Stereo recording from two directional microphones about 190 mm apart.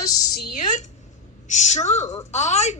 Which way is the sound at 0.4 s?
40° left (ahead or behind).